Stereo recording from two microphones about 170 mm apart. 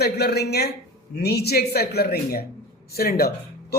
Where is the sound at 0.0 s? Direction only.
70° left (ahead or behind).